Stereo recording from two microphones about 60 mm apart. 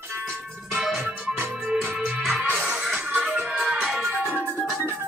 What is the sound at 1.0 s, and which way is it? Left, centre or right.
Music, right.